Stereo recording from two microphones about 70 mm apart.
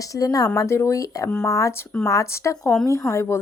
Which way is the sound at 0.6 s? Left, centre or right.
Left.